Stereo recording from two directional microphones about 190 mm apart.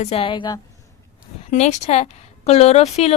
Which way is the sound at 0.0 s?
30° left (ahead or behind).